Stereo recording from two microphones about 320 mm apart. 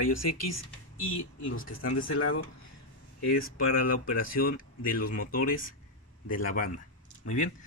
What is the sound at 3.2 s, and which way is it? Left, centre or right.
Speech, left.